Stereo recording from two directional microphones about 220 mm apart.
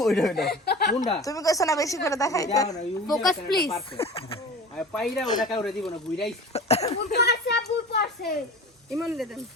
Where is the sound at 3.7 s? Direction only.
25° left (ahead or behind).